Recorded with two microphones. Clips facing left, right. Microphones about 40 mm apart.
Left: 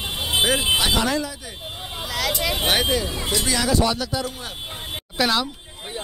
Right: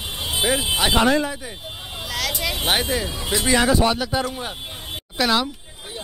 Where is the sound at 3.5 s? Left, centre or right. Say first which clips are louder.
Right 4 dB; right.